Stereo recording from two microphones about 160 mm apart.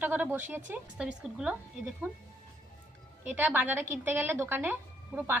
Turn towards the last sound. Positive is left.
turn(degrees=-10)  # may be behind; listen again after turning